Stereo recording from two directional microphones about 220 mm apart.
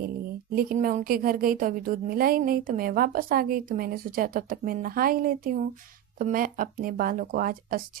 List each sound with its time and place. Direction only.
0.5 s a woman's voice: 40° right (ahead or behind)